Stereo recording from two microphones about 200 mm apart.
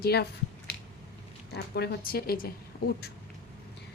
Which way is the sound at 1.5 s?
55° left (ahead or behind).